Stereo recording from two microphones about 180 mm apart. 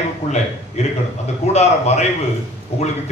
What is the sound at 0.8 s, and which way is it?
A man's voice, 35° left (ahead or behind).